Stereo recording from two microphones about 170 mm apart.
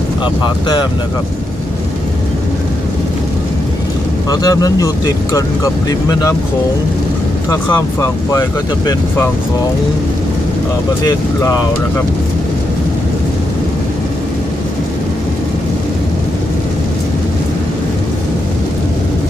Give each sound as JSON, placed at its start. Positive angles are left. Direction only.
{"t": 4.3, "sound": "speech", "side_deg": 20}
{"t": 7.7, "sound": "speech", "side_deg": 15}